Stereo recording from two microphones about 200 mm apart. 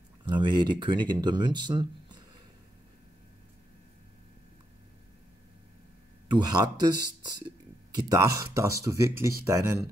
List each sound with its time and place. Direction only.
0.2 s speech: 25° right (ahead or behind)
6.3 s speech: 20° right (ahead or behind)